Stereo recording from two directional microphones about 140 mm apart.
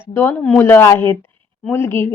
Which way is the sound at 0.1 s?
15° left (ahead or behind).